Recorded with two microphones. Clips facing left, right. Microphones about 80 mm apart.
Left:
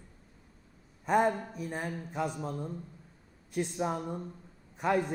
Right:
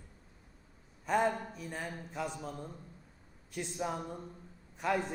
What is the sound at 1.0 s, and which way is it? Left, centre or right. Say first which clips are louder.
A man's voice: left 4 dB; centre.